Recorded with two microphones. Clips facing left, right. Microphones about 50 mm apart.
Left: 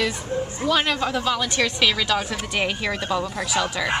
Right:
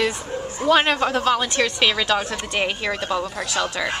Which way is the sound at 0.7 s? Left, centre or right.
Right.